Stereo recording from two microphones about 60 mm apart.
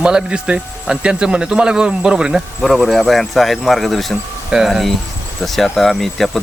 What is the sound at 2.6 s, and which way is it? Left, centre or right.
Speech, centre.